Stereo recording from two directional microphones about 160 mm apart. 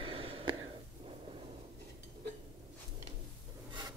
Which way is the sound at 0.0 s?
35° right (ahead or behind).